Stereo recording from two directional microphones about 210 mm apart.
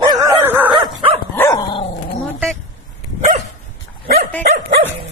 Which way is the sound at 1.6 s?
25° left (ahead or behind).